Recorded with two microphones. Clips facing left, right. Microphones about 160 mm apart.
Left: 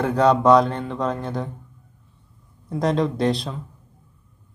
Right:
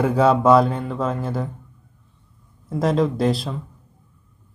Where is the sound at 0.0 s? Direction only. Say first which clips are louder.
Right 1 dB; 5° right (ahead or behind).